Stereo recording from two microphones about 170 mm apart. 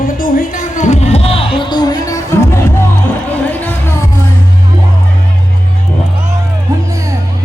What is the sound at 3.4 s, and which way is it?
Music, 10° left (ahead or behind).